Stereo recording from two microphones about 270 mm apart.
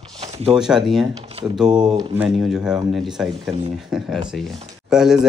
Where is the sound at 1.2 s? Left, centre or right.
Right.